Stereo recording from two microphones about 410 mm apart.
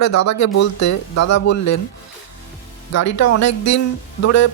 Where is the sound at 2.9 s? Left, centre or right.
Left.